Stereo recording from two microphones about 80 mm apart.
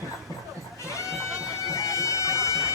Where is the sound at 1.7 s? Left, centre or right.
Left.